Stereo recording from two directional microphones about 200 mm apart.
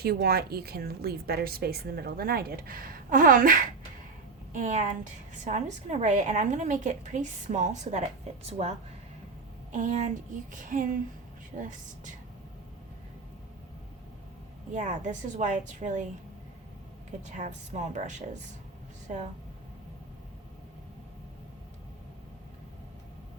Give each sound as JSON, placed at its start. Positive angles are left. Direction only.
{"t": 0.0, "sound": "a woman's voice", "side_deg": -50}
{"t": 9.7, "sound": "a woman's voice", "side_deg": -40}
{"t": 14.7, "sound": "a woman's voice", "side_deg": -35}
{"t": 17.1, "sound": "a woman's voice", "side_deg": -35}